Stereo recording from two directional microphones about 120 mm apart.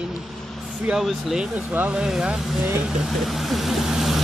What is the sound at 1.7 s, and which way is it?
Speech, 15° right (ahead or behind).